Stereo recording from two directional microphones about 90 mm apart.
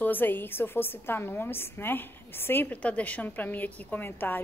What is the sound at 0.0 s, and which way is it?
A woman's voice, 20° left (ahead or behind).